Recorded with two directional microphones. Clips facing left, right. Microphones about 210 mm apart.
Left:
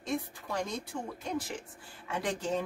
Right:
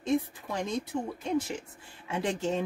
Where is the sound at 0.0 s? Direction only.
20° right (ahead or behind).